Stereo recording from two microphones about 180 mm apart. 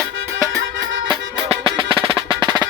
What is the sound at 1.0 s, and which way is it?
Percussion, 30° right (ahead or behind).